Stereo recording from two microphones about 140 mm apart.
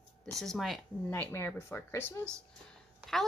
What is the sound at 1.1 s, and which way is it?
Speech, 15° left (ahead or behind).